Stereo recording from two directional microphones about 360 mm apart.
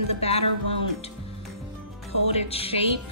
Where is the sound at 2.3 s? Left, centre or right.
Centre.